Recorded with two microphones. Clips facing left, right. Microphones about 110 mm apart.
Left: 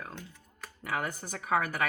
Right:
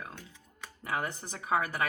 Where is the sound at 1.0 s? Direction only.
25° right (ahead or behind).